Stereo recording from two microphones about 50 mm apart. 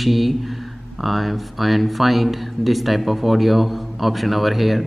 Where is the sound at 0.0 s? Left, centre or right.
Centre.